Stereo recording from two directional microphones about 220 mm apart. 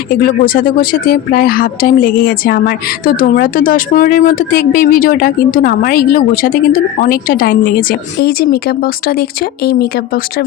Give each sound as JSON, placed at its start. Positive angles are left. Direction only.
{"t": 0.2, "sound": "speech", "side_deg": 40}